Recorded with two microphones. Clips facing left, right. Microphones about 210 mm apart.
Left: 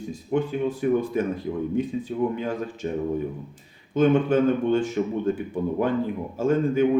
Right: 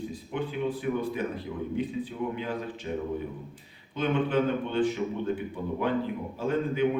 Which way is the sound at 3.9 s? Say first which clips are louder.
Left 7 dB; 45° left (ahead or behind).